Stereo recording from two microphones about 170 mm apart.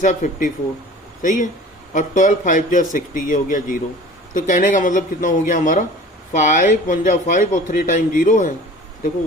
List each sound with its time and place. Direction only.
0.0 s a man's voice: 50° left (ahead or behind)